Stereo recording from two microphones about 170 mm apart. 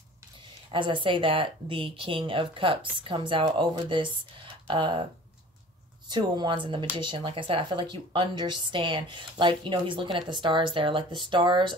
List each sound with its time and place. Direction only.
0.7 s speech: 30° right (ahead or behind)
6.0 s speech: 25° right (ahead or behind)